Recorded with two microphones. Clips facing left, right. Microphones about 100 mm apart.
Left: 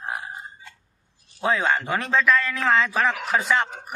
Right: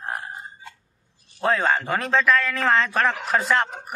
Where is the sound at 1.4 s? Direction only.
Centre (ahead or behind).